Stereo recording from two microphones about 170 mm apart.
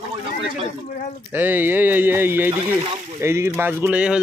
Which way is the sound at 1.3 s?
10° right (ahead or behind).